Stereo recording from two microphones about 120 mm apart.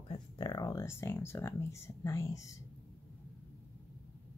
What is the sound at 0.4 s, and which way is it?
Speech, 35° left (ahead or behind).